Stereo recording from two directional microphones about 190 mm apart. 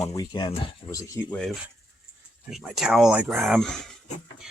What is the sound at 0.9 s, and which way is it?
Speech, 10° left (ahead or behind).